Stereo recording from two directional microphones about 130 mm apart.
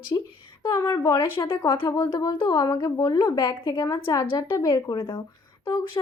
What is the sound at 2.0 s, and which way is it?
A woman's voice, 25° left (ahead or behind).